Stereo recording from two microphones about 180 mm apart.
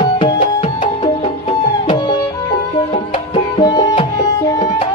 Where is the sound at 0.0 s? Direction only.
30° left (ahead or behind).